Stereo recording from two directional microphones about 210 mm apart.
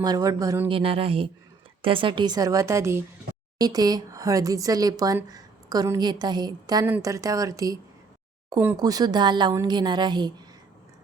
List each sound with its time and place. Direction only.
0.0 s speech: 20° right (ahead or behind)
0.7 s speech: 25° right (ahead or behind)